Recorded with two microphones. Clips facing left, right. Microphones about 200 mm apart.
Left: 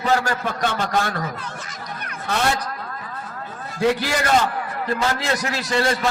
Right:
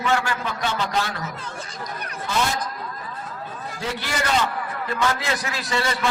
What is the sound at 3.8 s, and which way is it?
Speech, 65° left (ahead or behind).